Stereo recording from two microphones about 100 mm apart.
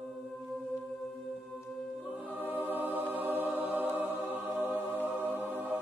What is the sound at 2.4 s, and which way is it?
Music, 20° right (ahead or behind).